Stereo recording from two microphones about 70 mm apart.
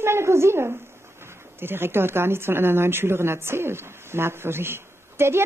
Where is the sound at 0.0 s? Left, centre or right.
Right.